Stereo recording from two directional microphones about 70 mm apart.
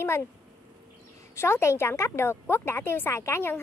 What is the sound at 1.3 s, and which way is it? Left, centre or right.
A woman's voice, left.